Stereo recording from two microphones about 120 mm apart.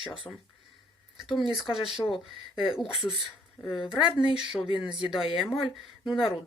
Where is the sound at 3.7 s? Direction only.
5° right (ahead or behind).